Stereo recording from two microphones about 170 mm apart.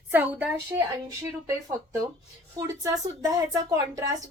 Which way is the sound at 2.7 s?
20° right (ahead or behind).